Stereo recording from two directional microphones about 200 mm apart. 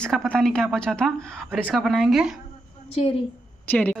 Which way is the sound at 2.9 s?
30° left (ahead or behind).